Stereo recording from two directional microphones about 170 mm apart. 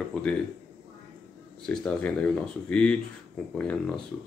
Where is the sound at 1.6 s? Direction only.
5° left (ahead or behind).